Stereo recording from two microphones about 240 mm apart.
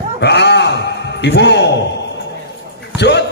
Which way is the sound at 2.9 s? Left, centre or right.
Left.